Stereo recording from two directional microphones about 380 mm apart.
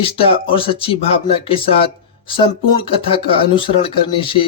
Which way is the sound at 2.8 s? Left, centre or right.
Centre.